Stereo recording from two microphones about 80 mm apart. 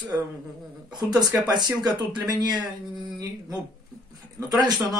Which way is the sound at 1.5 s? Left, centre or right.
Right.